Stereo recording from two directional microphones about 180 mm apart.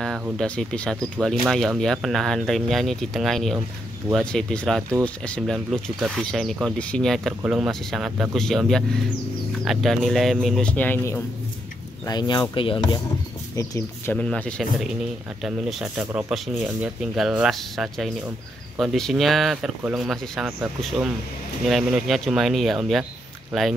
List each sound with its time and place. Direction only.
0.4 s speech: 5° left (ahead or behind)
12.1 s speech: 25° left (ahead or behind)
13.6 s speech: 15° left (ahead or behind); by 20.5 s centre (ahead or behind)
21.6 s speech: centre (ahead or behind)